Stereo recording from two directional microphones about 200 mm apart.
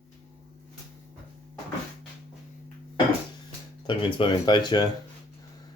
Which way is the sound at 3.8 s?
25° left (ahead or behind).